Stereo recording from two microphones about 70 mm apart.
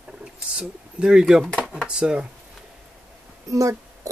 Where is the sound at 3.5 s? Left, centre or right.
Right.